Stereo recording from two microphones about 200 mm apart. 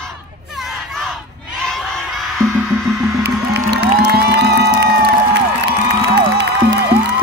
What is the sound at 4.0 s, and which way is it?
Music, 55° right (ahead or behind).